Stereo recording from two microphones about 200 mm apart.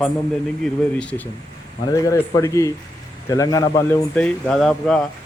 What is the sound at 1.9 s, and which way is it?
Speech, 15° left (ahead or behind).